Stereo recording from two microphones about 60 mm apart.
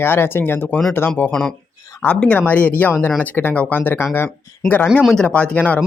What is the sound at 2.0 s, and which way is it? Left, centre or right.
Speech, left.